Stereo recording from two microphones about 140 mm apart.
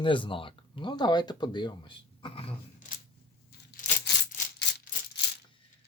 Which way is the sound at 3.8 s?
70° left (ahead or behind).